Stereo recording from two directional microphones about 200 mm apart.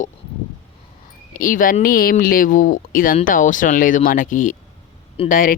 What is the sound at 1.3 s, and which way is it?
Speech, 45° left (ahead or behind).